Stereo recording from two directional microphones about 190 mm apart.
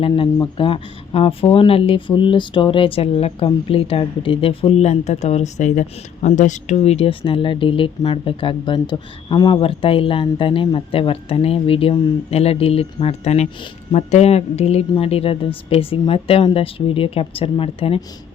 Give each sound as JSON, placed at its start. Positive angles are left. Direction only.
{"t": 0.0, "sound": "speech", "side_deg": 25}